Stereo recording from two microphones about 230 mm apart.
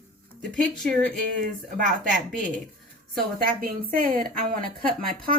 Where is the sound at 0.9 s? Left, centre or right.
Right.